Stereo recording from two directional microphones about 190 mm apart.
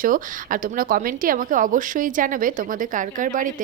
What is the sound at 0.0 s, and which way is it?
A woman's voice, 45° right (ahead or behind).